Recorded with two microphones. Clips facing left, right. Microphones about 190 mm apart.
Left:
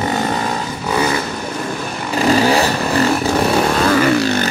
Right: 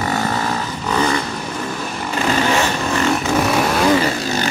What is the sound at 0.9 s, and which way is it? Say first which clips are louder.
Vehicle: left 1 dB; 10° left (ahead or behind).